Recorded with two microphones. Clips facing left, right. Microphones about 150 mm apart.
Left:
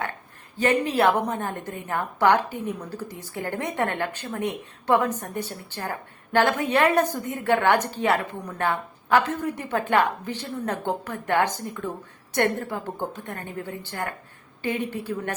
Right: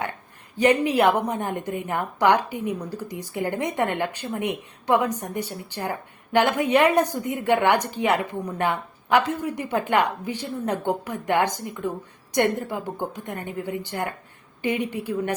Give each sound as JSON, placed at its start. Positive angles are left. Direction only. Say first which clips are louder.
{"t": 0.5, "sound": "a woman's voice", "louder": "right 3 dB", "side_deg": -15}